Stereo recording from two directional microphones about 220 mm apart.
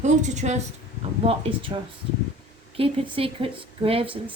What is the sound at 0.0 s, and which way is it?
A woman's voice, 30° right (ahead or behind).